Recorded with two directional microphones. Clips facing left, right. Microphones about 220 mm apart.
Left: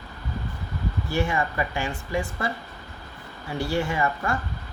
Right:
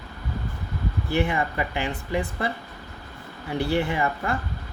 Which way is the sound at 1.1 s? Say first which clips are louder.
Right 1 dB; 20° right (ahead or behind).